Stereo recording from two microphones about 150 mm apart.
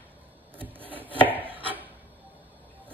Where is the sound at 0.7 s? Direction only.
10° right (ahead or behind).